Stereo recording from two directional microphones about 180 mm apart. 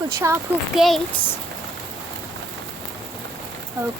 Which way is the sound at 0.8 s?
Centre (ahead or behind).